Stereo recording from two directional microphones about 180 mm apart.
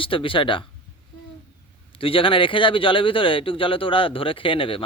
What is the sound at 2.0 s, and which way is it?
Speech, 30° left (ahead or behind).